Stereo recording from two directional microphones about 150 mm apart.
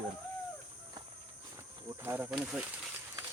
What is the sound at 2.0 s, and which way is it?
Speech, 15° right (ahead or behind).